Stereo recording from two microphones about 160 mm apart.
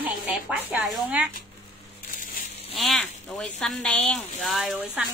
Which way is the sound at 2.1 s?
60° left (ahead or behind).